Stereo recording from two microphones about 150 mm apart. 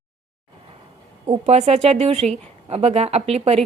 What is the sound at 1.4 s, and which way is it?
A woman's voice, 45° right (ahead or behind).